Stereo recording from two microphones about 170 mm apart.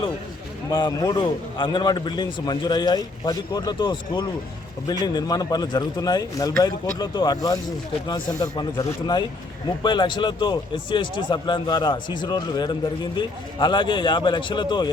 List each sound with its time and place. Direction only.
0.7 s a man's voice: 20° left (ahead or behind)